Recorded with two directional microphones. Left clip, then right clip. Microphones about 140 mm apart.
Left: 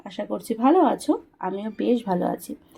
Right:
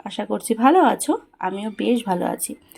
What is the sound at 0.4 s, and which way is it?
Speech, centre (ahead or behind).